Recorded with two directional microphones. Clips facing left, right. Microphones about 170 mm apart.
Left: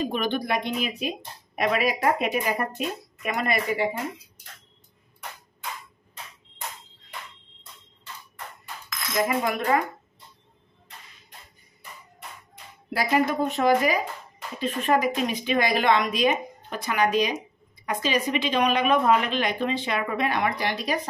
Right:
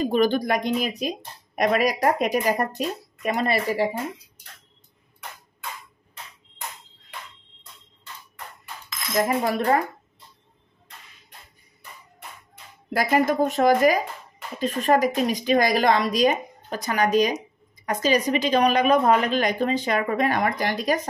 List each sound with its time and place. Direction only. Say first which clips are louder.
0.1 s speech: right 5 dB; 40° right (ahead or behind)
9.4 s speech: right 2 dB; 35° right (ahead or behind)
12.9 s a woman's voice: right 2 dB; 45° right (ahead or behind)